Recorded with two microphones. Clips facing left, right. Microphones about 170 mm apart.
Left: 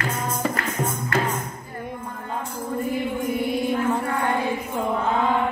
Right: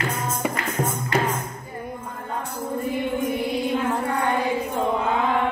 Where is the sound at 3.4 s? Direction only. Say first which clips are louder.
Left 1 dB; centre (ahead or behind).